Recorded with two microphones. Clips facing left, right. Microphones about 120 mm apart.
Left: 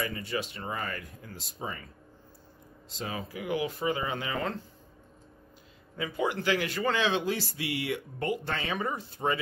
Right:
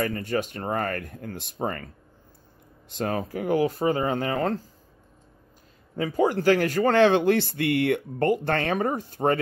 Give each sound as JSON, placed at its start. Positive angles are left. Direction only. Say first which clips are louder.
{"t": 0.0, "sound": "speech", "louder": "right 7 dB", "side_deg": -50}
{"t": 2.9, "sound": "speech", "louder": "right 9 dB", "side_deg": -55}
{"t": 5.9, "sound": "speech", "louder": "right 8 dB", "side_deg": -40}